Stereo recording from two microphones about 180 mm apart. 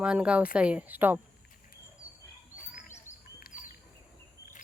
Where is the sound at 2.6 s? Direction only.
45° left (ahead or behind).